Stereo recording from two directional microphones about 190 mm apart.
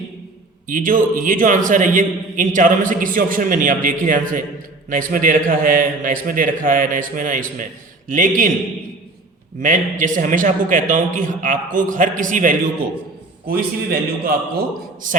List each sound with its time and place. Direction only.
0.7 s a man's voice: 45° right (ahead or behind)
9.6 s a man's voice: 45° right (ahead or behind)